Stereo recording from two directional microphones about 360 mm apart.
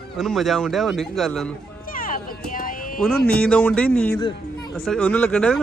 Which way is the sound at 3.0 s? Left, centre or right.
Centre.